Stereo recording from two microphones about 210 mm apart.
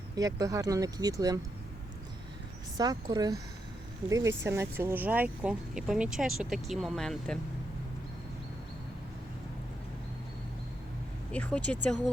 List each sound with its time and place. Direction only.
0.2 s speech: 15° right (ahead or behind)
2.7 s speech: 15° right (ahead or behind); by 7.3 s centre (ahead or behind)
11.3 s speech: 5° left (ahead or behind)